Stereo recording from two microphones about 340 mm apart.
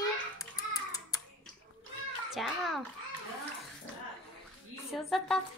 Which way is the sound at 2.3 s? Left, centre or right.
Centre.